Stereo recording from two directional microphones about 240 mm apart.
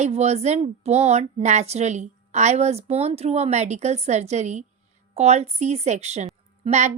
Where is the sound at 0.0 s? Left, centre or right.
Right.